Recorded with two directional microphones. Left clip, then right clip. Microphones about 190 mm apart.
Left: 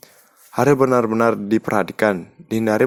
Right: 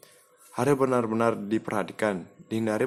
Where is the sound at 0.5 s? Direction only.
35° left (ahead or behind).